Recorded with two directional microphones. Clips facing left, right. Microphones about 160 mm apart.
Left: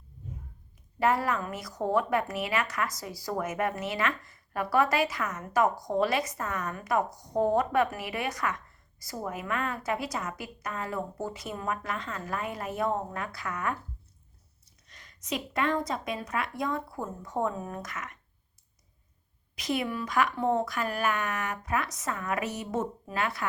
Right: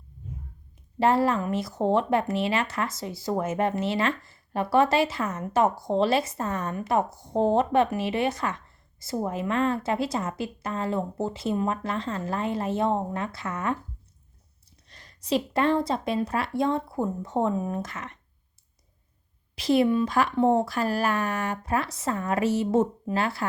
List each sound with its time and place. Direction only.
0.9 s speech: 30° right (ahead or behind)
14.8 s speech: 30° right (ahead or behind)
19.5 s speech: 30° right (ahead or behind)